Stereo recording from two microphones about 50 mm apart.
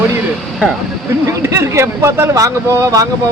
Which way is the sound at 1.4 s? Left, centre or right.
Right.